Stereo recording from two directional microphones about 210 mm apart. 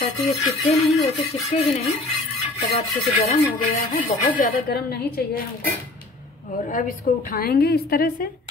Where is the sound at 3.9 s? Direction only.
45° left (ahead or behind).